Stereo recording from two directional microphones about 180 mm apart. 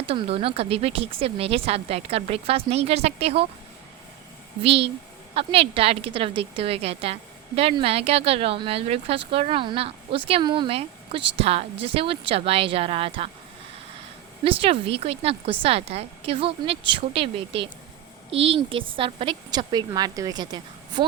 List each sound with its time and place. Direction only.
0.1 s a woman's voice: 30° right (ahead or behind)
4.6 s a woman's voice: 35° right (ahead or behind)
14.4 s a woman's voice: 30° right (ahead or behind)